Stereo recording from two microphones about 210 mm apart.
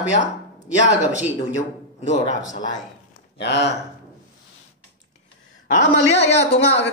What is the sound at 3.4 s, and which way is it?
Speech, 55° left (ahead or behind).